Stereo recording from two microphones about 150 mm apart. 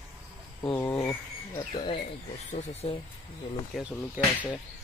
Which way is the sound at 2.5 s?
45° left (ahead or behind).